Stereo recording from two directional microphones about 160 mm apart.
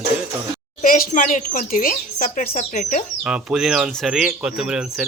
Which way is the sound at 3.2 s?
5° right (ahead or behind).